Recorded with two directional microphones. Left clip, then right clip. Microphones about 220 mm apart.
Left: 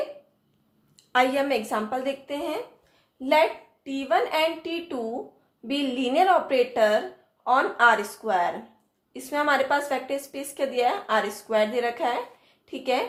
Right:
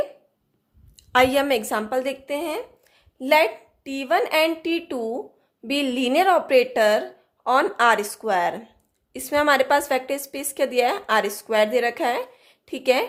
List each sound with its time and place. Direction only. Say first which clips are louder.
0.9 s a woman's voice: right 4 dB; 35° right (ahead or behind)